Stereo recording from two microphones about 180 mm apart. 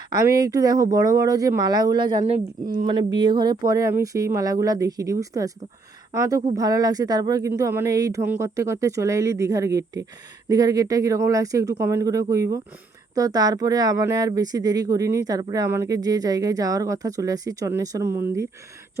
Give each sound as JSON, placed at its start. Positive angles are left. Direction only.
{"t": 0.1, "sound": "speech", "side_deg": -20}